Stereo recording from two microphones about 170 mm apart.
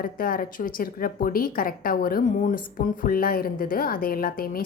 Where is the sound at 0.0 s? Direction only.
55° left (ahead or behind).